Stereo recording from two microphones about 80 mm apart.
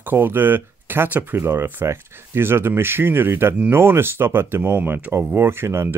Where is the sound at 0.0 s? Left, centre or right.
Right.